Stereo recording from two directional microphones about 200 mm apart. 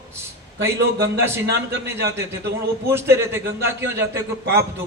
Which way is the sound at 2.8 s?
10° right (ahead or behind).